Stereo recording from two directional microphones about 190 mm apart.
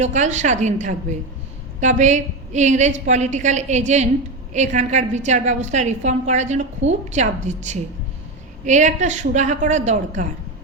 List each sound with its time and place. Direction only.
0.0 s a woman's voice: 40° right (ahead or behind)